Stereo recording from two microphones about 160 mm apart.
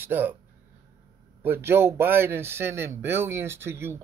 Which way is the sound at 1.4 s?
15° right (ahead or behind).